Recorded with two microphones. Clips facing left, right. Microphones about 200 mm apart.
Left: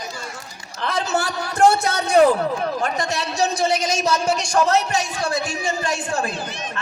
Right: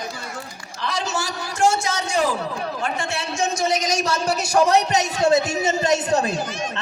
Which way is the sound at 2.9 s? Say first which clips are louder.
Left 3 dB; 40° left (ahead or behind).